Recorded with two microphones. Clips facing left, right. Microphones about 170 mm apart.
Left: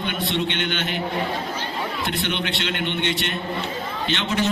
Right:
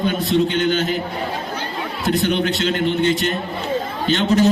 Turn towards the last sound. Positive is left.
turn(degrees=-40)  # may be behind; listen again after turning